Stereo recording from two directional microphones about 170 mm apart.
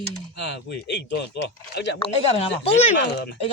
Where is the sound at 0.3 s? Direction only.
90° left.